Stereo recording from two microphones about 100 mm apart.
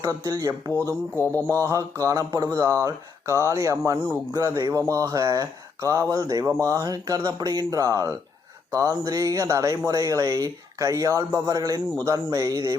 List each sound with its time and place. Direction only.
0.0 s speech: 35° right (ahead or behind)
4.3 s speech: 35° right (ahead or behind)